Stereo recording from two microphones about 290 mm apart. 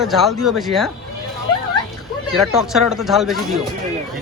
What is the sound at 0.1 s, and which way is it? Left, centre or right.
Speech, centre.